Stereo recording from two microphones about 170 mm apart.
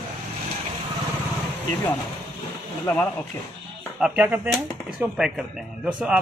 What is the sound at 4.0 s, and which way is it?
A man's voice, 5° right (ahead or behind).